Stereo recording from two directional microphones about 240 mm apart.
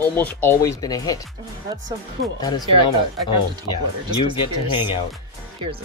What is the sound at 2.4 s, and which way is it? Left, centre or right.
Speech, centre.